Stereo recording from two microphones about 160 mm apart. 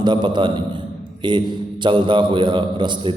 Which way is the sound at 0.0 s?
30° right (ahead or behind).